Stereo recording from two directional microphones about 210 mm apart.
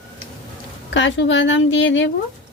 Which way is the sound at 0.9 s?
60° left (ahead or behind).